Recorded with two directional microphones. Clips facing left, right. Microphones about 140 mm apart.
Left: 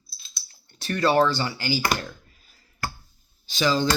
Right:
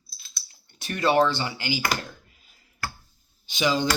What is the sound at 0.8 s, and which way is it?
Speech, 20° right (ahead or behind).